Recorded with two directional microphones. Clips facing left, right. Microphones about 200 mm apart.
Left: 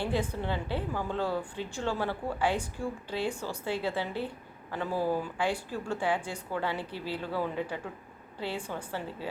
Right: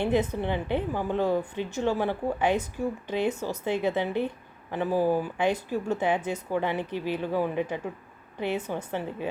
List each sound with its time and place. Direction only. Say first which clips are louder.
0.0 s a woman's voice: right 6 dB; 20° right (ahead or behind)